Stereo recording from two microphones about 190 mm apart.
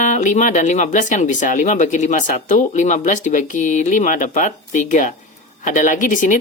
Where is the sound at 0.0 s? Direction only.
40° left (ahead or behind).